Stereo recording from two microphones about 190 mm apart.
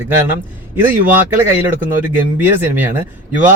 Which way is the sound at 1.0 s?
10° right (ahead or behind).